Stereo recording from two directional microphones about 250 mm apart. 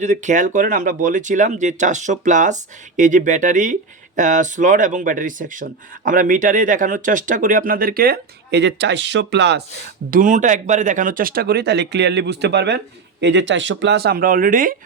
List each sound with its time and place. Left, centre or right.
0.0 s speech: right
10.1 s speech: right